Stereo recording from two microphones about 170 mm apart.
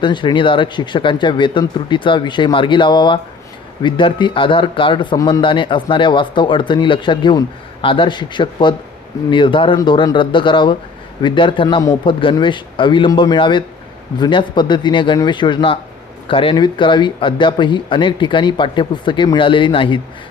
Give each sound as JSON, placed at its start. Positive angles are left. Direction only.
{"t": 0.0, "sound": "speech", "side_deg": 25}